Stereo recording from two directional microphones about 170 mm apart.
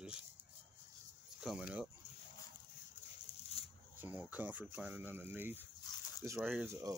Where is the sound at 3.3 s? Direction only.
40° left (ahead or behind).